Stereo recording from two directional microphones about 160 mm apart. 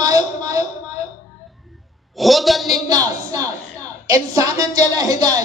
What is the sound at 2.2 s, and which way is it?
Speech, centre (ahead or behind).